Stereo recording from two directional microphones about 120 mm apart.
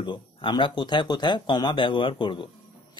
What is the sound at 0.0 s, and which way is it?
Speech, 45° left (ahead or behind).